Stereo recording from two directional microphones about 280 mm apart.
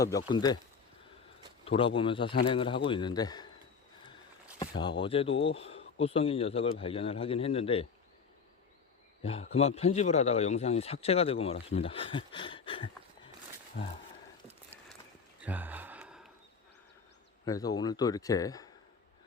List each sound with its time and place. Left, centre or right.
0.3 s speech: centre
1.6 s speech: centre
4.8 s speech: centre
9.2 s speech: left
15.4 s gasp: centre
17.4 s speech: centre